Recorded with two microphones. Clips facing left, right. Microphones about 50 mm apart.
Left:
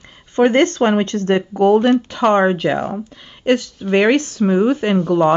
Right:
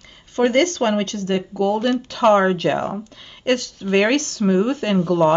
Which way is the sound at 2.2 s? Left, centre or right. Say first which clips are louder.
Even; centre.